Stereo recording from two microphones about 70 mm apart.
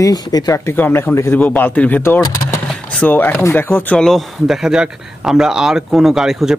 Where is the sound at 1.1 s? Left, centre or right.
Left.